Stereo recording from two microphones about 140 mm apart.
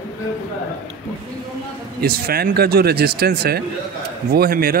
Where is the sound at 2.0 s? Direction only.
90° right.